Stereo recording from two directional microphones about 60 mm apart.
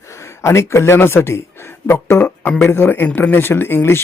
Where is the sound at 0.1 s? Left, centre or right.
Left.